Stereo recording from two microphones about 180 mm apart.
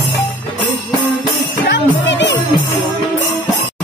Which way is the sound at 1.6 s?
75° left (ahead or behind).